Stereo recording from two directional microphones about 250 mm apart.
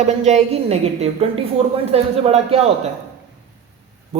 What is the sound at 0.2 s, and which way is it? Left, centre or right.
Speech, right.